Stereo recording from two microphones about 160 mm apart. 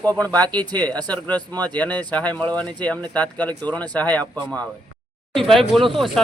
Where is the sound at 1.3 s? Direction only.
25° right (ahead or behind).